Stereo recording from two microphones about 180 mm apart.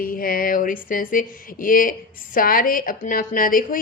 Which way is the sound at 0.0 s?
50° left (ahead or behind).